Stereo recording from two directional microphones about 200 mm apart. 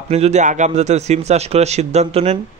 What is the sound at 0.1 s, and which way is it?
A man's voice, 35° right (ahead or behind).